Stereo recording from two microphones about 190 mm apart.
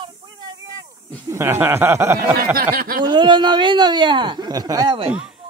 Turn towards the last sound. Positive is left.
turn(degrees=-25)  # may be behind; listen again after turning